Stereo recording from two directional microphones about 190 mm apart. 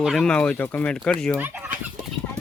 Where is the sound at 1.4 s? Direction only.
10° right (ahead or behind).